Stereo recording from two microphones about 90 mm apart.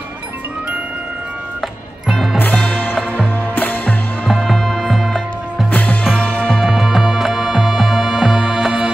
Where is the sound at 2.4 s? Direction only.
20° left (ahead or behind).